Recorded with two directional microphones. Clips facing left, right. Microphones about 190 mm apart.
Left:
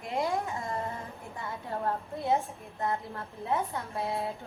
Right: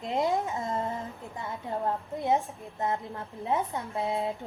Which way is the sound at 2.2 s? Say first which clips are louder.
Right 2 dB; 15° right (ahead or behind).